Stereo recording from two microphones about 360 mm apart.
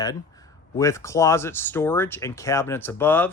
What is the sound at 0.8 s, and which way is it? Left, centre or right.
Speech, centre.